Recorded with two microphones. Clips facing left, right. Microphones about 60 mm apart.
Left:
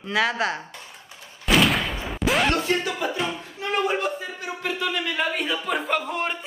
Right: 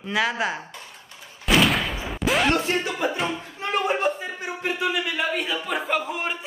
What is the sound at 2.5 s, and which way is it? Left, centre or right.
Music, right.